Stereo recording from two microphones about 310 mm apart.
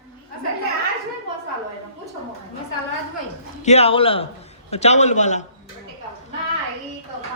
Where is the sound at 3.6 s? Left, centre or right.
Centre.